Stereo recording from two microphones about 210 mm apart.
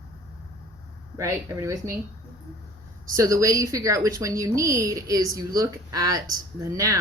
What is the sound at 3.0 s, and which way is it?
A woman's voice, 15° right (ahead or behind).